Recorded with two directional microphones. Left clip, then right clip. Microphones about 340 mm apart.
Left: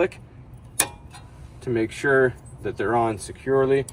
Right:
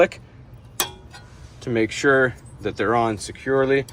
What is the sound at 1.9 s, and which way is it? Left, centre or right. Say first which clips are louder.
Speech: right 2 dB; centre.